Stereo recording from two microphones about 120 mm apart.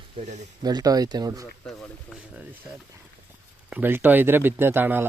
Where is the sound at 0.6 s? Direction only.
35° right (ahead or behind).